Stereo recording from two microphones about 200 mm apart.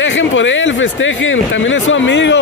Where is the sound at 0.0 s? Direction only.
70° left (ahead or behind).